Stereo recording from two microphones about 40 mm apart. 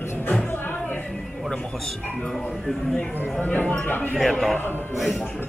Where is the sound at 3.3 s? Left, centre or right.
Left.